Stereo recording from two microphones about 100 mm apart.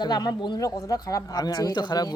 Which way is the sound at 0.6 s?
35° left (ahead or behind).